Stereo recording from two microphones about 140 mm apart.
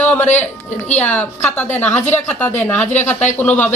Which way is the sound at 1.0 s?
10° left (ahead or behind).